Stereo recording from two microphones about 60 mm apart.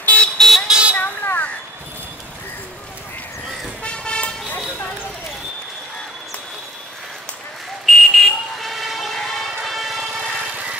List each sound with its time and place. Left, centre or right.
0.0 s vehicle: left
0.4 s vehicle: centre
0.7 s a sound: centre
0.9 s a sound: left
3.8 s vehicle: centre
7.8 s vehicle: centre